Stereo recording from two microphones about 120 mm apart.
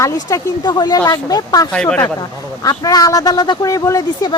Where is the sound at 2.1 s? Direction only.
30° left (ahead or behind).